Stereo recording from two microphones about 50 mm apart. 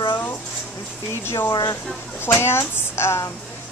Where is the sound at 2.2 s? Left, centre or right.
Left.